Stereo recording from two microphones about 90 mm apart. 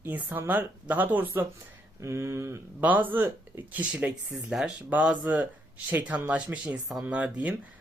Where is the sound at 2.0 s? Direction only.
30° right (ahead or behind).